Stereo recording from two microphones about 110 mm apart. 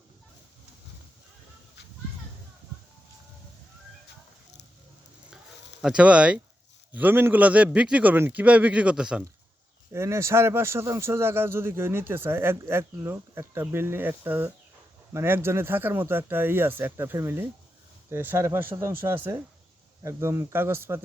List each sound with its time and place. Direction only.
5.8 s a man's voice: 10° right (ahead or behind)
9.9 s a man's voice: 25° right (ahead or behind)